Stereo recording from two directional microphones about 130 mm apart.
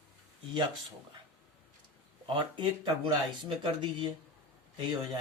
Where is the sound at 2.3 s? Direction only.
35° right (ahead or behind).